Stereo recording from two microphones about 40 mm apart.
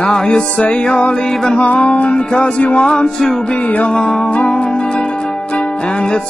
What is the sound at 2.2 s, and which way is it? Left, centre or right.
Music, left.